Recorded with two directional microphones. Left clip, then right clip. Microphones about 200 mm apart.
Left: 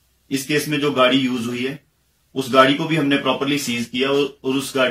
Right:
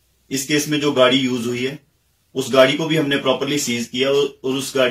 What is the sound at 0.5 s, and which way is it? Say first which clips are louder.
Speech: right 1 dB; 10° right (ahead or behind).